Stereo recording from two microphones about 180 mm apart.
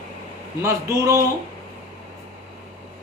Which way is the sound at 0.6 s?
20° right (ahead or behind).